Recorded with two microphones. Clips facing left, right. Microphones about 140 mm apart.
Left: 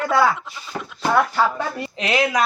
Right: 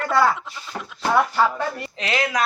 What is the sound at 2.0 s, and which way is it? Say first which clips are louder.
Speech: left 4 dB; 15° left (ahead or behind).